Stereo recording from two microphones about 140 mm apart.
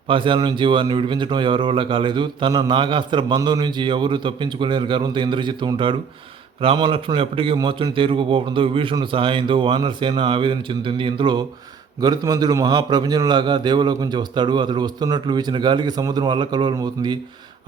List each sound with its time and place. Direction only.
0.1 s a man's voice: 35° right (ahead or behind)